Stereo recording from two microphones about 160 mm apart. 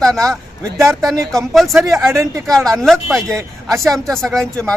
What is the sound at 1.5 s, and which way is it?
Speech, centre (ahead or behind).